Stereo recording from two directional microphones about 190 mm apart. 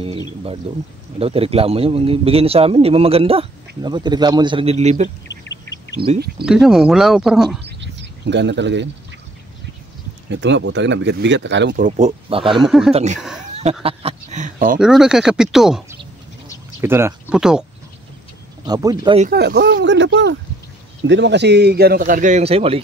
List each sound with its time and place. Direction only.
0.7 s a man's voice: 30° right (ahead or behind)
5.3 s duck: 70° left (ahead or behind)
6.1 s a man's voice: 60° right (ahead or behind)
6.4 s speech: 5° right (ahead or behind)
7.6 s bird: 65° right (ahead or behind)
10.3 s speech: 70° right (ahead or behind)
11.7 s speech: 45° right (ahead or behind)
12.3 s speech: 30° right (ahead or behind)
12.6 s speech: centre (ahead or behind)
12.9 s a man's voice: 40° right (ahead or behind)
14.8 s speech: 5° right (ahead or behind)
16.8 s speech: 10° right (ahead or behind)
18.7 s speech: 20° right (ahead or behind)
19.3 s a man's voice: 60° right (ahead or behind); by 22.8 s 30° right (ahead or behind)